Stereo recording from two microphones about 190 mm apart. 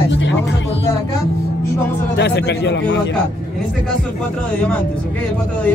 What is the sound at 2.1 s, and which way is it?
Speech, 60° left (ahead or behind).